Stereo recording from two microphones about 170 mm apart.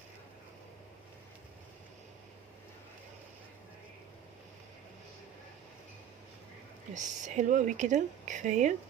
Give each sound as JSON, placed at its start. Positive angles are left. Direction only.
{"t": 6.9, "sound": "speech", "side_deg": -45}